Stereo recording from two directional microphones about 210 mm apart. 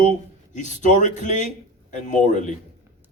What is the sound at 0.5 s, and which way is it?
A man's voice, 35° left (ahead or behind).